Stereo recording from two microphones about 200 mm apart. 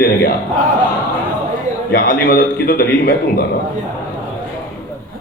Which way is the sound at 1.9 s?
45° left (ahead or behind).